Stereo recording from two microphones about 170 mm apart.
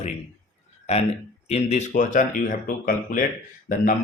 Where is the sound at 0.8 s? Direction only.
40° left (ahead or behind).